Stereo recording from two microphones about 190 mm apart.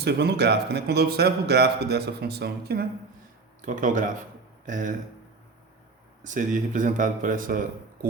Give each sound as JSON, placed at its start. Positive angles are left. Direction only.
{"t": 0.0, "sound": "speech", "side_deg": -60}
{"t": 3.7, "sound": "speech", "side_deg": -45}
{"t": 6.2, "sound": "speech", "side_deg": -40}